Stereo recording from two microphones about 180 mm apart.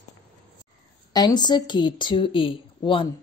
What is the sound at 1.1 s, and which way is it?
Speech, 25° left (ahead or behind).